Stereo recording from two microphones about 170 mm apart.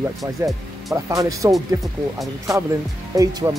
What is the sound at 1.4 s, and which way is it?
Speech, 20° right (ahead or behind).